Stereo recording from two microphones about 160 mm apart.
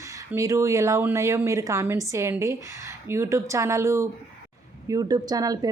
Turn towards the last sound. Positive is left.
turn(degrees=-20)  # may be behind; listen again after turning